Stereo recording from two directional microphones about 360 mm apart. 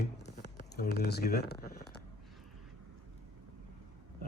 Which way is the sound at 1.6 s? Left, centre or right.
Left.